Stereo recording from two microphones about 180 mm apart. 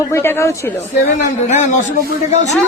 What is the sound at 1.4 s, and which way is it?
A man's voice, 40° left (ahead or behind).